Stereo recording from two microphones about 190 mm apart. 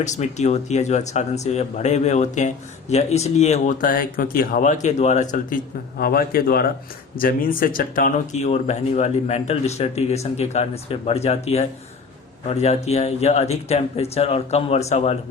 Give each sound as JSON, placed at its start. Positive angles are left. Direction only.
{"t": 0.0, "sound": "speech", "side_deg": 40}
{"t": 6.0, "sound": "a man's voice", "side_deg": 50}